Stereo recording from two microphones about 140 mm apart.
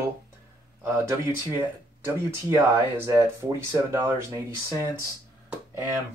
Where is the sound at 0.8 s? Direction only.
20° right (ahead or behind).